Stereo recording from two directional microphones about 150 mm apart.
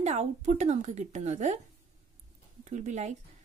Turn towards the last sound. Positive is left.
turn(degrees=-50)  # may be behind; listen again after turning